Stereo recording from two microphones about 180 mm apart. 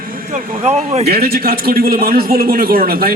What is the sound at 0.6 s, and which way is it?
Speech, 35° right (ahead or behind).